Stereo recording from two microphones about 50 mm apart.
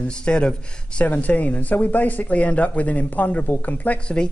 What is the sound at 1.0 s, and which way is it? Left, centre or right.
Speech, left.